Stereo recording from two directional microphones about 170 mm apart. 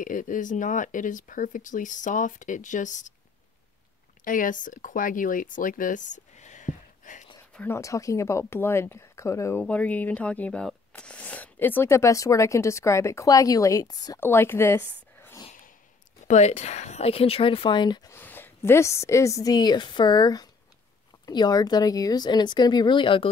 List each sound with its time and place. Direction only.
0.0 s speech: 50° left (ahead or behind)
4.2 s speech: 55° left (ahead or behind)
7.5 s speech: 15° left (ahead or behind)
16.3 s speech: 40° left (ahead or behind); by 18.1 s 25° left (ahead or behind)
18.1 s a woman's voice: 10° left (ahead or behind); by 23.3 s 30° left (ahead or behind)